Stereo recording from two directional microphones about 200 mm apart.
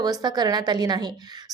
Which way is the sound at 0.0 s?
20° right (ahead or behind).